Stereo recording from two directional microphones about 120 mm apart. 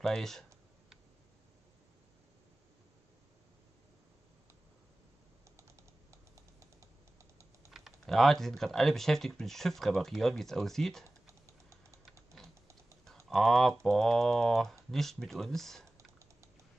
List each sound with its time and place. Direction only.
0.0 s speech: 5° left (ahead or behind)
7.7 s speech: centre (ahead or behind)
11.1 s typing: 25° right (ahead or behind)
13.3 s speech: centre (ahead or behind)